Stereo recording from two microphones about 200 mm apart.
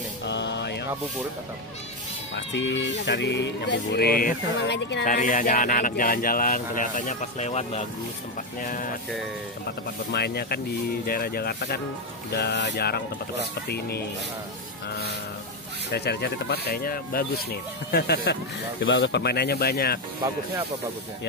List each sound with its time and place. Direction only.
0.2 s music: 60° left (ahead or behind)
2.3 s speech: 65° left (ahead or behind); by 4.7 s 45° left (ahead or behind)
4.7 s speech: 60° left (ahead or behind)
5.0 s speech: 40° left (ahead or behind)
9.7 s speech: 55° left (ahead or behind)
15.9 s speech: 55° left (ahead or behind)